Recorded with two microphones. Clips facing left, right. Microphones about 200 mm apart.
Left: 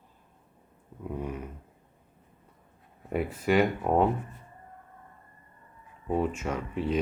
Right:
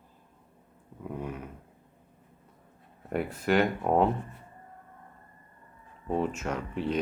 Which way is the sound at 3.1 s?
5° left (ahead or behind).